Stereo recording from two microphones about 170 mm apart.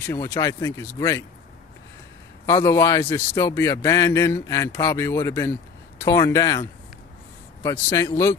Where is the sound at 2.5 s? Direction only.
15° left (ahead or behind).